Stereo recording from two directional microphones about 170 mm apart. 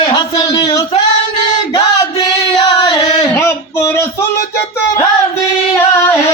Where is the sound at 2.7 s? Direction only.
20° left (ahead or behind).